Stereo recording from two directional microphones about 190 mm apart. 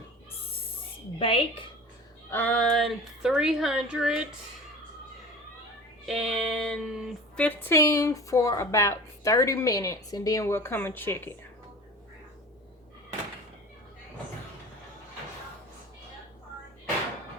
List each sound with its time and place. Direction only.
1.2 s a woman's voice: 30° left (ahead or behind)
2.3 s speech: 10° left (ahead or behind)
6.1 s speech: centre (ahead or behind)